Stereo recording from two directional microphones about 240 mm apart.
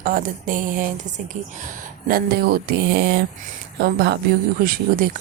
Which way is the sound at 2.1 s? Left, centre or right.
Right.